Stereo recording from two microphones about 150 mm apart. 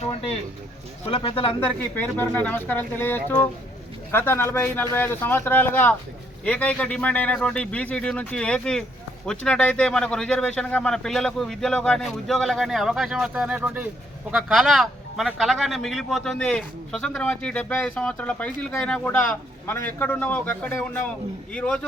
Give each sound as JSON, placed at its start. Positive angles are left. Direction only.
{"t": 1.0, "sound": "speech", "side_deg": 35}
{"t": 1.6, "sound": "a man's voice", "side_deg": 10}